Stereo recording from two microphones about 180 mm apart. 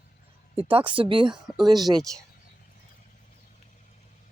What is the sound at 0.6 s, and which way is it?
Speech, 30° right (ahead or behind).